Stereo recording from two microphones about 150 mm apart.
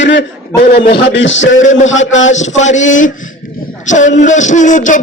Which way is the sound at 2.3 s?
50° left (ahead or behind).